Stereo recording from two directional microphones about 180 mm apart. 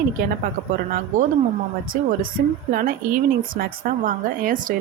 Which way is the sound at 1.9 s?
50° right (ahead or behind).